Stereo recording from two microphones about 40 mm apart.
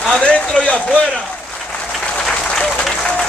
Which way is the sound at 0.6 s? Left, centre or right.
Left.